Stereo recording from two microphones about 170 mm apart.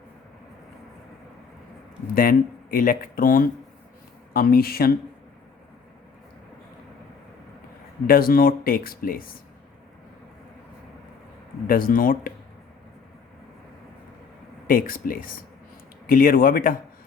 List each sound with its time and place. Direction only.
2.1 s speech: 55° left (ahead or behind)
8.0 s speech: 60° left (ahead or behind)
11.7 s speech: 55° left (ahead or behind)
14.7 s speech: 55° left (ahead or behind)